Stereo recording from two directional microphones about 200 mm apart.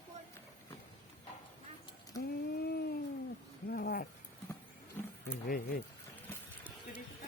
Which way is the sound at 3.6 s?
50° left (ahead or behind).